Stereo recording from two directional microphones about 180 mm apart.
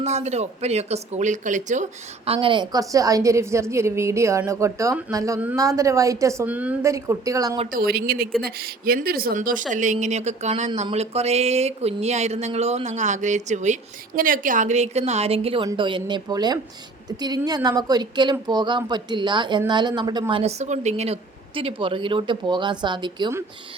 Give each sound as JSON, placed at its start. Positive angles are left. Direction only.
{"t": 0.0, "sound": "a woman's voice", "side_deg": -40}
{"t": 7.7, "sound": "a woman's voice", "side_deg": -60}